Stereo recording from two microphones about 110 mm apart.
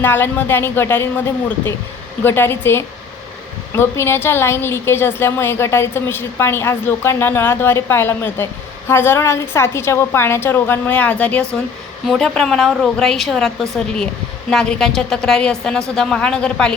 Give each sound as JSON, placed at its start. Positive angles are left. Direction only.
{"t": 0.0, "sound": "a woman's voice", "side_deg": 20}
{"t": 2.2, "sound": "a woman's voice", "side_deg": 20}